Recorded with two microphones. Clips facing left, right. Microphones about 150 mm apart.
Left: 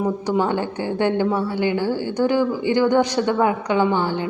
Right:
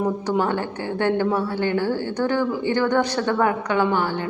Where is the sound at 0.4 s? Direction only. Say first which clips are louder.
Left 2 dB; 15° left (ahead or behind).